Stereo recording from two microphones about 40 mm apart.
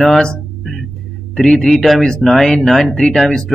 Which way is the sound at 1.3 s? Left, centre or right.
Centre.